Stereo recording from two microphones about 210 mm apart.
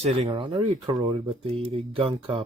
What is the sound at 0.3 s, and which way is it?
Speech, 20° right (ahead or behind).